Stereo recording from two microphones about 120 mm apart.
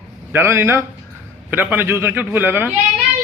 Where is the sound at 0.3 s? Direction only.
20° right (ahead or behind).